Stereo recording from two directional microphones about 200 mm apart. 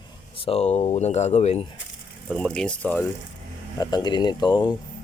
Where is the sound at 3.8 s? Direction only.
20° left (ahead or behind).